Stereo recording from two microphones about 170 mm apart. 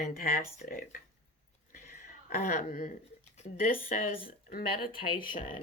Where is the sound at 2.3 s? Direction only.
55° left (ahead or behind).